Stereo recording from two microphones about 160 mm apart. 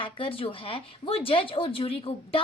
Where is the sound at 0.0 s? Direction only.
35° left (ahead or behind).